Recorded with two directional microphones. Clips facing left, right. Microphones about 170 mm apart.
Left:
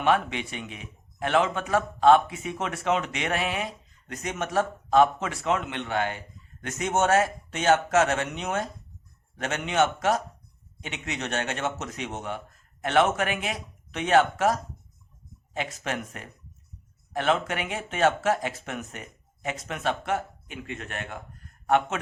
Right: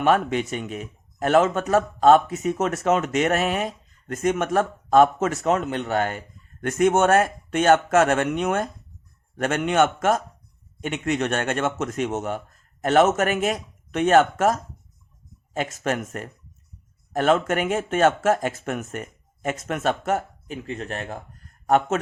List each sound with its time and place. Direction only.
0.0 s a man's voice: 45° right (ahead or behind)